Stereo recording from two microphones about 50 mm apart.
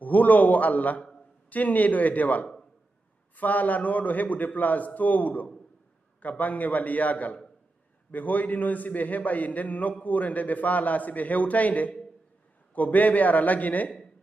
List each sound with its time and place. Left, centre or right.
0.0 s a man's voice: left